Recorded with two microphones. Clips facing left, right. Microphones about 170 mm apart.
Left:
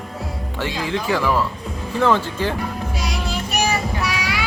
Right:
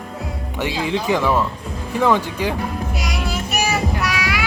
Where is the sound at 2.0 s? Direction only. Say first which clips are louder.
Right 1 dB; 15° right (ahead or behind).